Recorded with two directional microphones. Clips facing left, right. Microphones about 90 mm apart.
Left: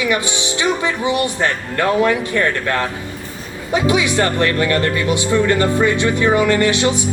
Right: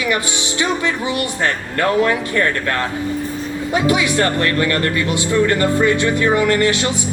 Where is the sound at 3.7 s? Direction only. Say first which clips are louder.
Left 1 dB; 20° left (ahead or behind).